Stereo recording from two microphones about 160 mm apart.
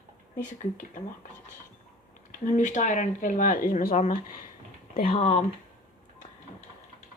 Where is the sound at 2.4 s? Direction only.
50° left (ahead or behind).